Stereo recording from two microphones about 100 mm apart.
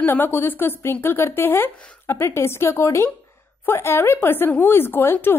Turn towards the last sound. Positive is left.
turn(degrees=20)  # may be behind; listen again after turning